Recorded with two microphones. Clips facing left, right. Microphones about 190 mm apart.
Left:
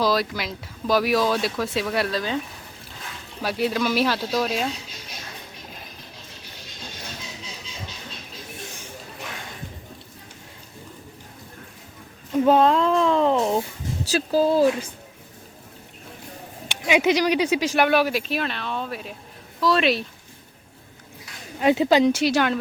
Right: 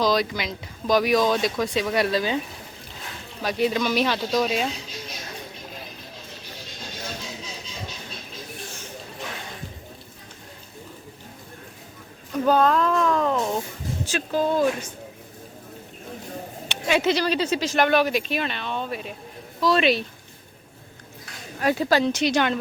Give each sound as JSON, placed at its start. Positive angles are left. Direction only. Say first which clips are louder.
{"t": 0.0, "sound": "speech", "louder": "even", "side_deg": 5}
{"t": 3.4, "sound": "speech", "louder": "even", "side_deg": 0}
{"t": 12.3, "sound": "speech", "louder": "left 2 dB", "side_deg": 25}
{"t": 16.6, "sound": "speech", "louder": "left 2 dB", "side_deg": 10}
{"t": 21.6, "sound": "speech", "louder": "left 4 dB", "side_deg": 20}
{"t": 22.1, "sound": "speech", "louder": "left 1 dB", "side_deg": 5}